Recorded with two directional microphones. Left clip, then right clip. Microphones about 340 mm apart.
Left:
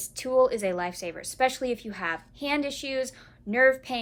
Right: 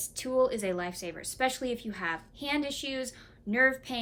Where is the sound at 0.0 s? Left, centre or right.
Centre.